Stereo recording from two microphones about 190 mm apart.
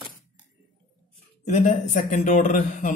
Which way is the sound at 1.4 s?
40° left (ahead or behind).